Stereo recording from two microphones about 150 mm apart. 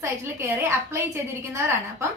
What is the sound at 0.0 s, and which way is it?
A woman's voice, 15° right (ahead or behind).